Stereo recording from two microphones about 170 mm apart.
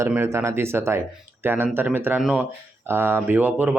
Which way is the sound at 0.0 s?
15° right (ahead or behind).